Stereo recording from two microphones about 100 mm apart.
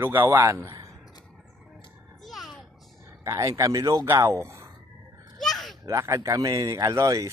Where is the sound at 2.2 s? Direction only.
Centre (ahead or behind).